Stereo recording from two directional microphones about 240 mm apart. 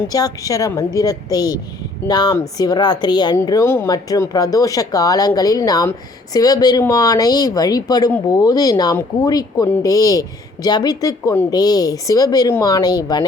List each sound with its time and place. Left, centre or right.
0.1 s speech: centre